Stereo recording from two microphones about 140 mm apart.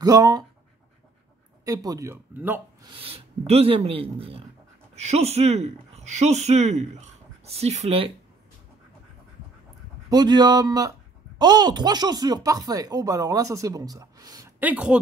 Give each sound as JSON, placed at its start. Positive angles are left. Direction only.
{"t": 0.0, "sound": "speech", "side_deg": -30}
{"t": 1.6, "sound": "speech", "side_deg": -25}
{"t": 2.3, "sound": "speech", "side_deg": -15}
{"t": 2.8, "sound": "speech", "side_deg": -40}
{"t": 10.0, "sound": "speech", "side_deg": -30}
{"t": 14.6, "sound": "speech", "side_deg": -10}